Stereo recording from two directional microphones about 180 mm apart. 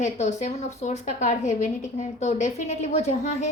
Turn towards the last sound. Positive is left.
turn(degrees=40)  # may be behind; listen again after turning